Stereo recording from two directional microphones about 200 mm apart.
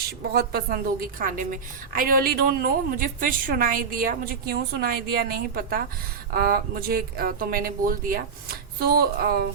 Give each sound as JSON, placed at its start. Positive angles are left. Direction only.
{"t": 0.3, "sound": "a woman's voice", "side_deg": -50}